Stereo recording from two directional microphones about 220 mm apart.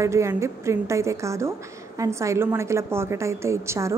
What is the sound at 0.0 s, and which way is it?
A woman's voice, 15° right (ahead or behind).